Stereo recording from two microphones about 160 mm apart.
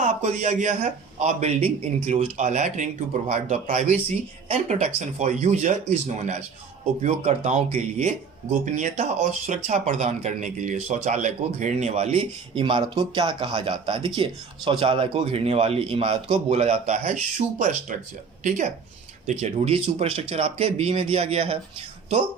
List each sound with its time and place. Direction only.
0.0 s a man's voice: 45° right (ahead or behind)
12.6 s a man's voice: 30° right (ahead or behind)